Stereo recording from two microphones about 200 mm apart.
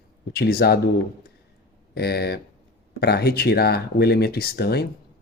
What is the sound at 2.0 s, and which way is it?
Speech, 50° left (ahead or behind).